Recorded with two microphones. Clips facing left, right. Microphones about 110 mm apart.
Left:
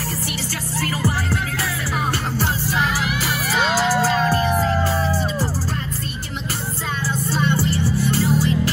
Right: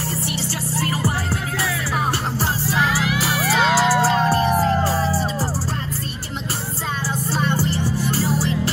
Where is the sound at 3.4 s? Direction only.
90° right.